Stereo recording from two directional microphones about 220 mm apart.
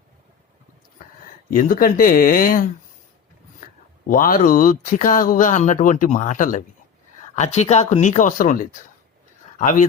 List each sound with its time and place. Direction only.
1.5 s speech: 40° left (ahead or behind)
4.1 s speech: 40° left (ahead or behind)